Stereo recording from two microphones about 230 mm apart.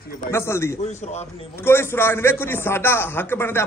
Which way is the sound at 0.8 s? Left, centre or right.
Left.